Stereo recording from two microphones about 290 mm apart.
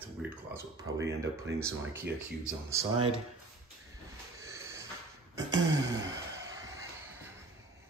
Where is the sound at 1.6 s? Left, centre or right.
Centre.